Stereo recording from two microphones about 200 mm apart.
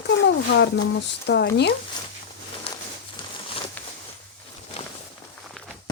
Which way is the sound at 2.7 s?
30° left (ahead or behind).